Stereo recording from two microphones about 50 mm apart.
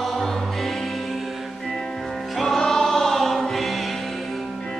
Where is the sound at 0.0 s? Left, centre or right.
Centre.